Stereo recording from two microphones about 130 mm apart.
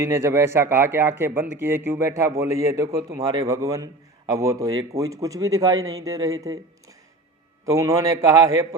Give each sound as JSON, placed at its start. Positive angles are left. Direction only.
{"t": 0.0, "sound": "a man's voice", "side_deg": -20}